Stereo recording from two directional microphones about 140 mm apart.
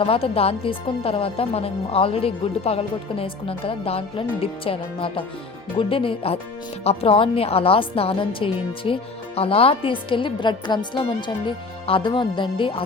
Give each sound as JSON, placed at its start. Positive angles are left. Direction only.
{"t": 0.0, "sound": "speech", "side_deg": 40}